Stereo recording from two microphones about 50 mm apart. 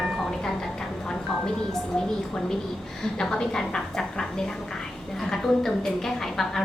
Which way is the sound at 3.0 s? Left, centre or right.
Centre.